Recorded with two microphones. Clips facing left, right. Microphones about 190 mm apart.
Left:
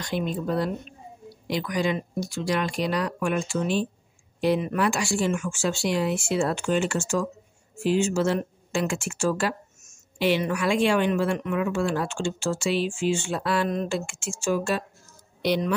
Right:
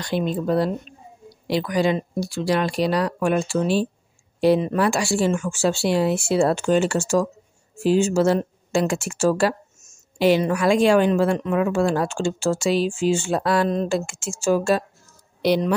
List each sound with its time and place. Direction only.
0.0 s speech: 30° right (ahead or behind)